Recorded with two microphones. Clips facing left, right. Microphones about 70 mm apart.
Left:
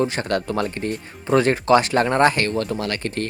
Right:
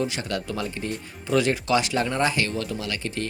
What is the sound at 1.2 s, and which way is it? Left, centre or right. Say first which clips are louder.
Speech: left 6 dB; left.